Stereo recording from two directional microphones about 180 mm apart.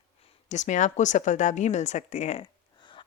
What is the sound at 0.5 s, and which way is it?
A woman's voice, 40° left (ahead or behind).